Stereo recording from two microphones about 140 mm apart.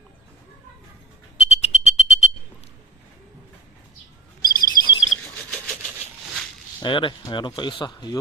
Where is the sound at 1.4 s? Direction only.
50° left (ahead or behind).